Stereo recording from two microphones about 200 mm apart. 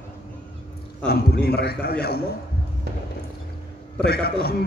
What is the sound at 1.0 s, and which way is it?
A man's voice, 50° left (ahead or behind).